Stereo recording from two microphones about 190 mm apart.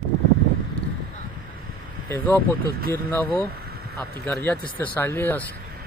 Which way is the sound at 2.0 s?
15° left (ahead or behind).